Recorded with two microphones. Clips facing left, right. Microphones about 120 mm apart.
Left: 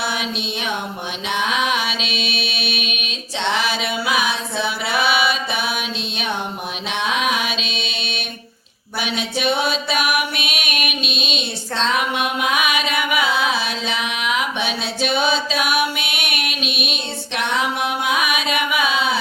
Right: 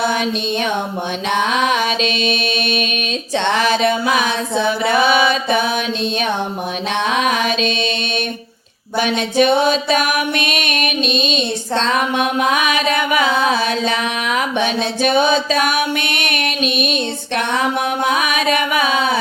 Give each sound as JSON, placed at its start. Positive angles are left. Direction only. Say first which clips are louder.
{"t": 2.0, "sound": "mantra", "louder": "right 7 dB", "side_deg": 5}
{"t": 3.3, "sound": "a sound", "louder": "right 5 dB", "side_deg": -50}
{"t": 4.9, "sound": "mantra", "louder": "right 3 dB", "side_deg": -50}
{"t": 7.3, "sound": "music", "louder": "right 5 dB", "side_deg": -45}
{"t": 9.4, "sound": "a sound", "louder": "right 7 dB", "side_deg": -45}
{"t": 10.4, "sound": "music", "louder": "right 5 dB", "side_deg": 5}
{"t": 11.1, "sound": "female singing", "louder": "right 7 dB", "side_deg": 5}
{"t": 11.9, "sound": "a sound", "louder": "right 4 dB", "side_deg": -45}
{"t": 13.5, "sound": "music", "louder": "right 6 dB", "side_deg": -50}
{"t": 15.6, "sound": "music", "louder": "right 3 dB", "side_deg": 5}
{"t": 18.4, "sound": "chant", "louder": "right 4 dB", "side_deg": -50}